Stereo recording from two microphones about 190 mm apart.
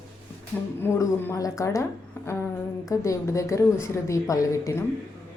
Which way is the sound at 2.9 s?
15° left (ahead or behind).